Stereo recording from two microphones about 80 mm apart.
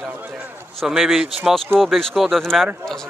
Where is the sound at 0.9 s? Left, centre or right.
Centre.